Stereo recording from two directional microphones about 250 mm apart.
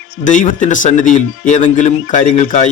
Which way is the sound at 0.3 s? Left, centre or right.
Left.